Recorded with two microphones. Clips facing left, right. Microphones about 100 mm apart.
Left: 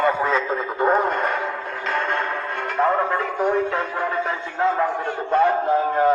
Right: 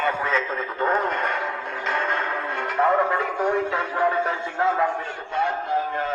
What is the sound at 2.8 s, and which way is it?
Speech, centre (ahead or behind).